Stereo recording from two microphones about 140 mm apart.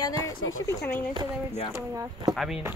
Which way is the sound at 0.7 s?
15° left (ahead or behind).